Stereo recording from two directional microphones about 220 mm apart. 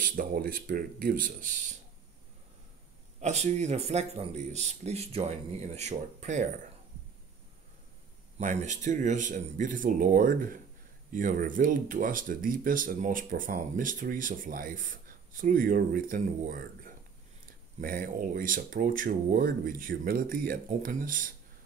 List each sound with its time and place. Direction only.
0.0 s speech: 40° right (ahead or behind)
3.2 s speech: 30° right (ahead or behind)
8.4 s speech: 35° right (ahead or behind)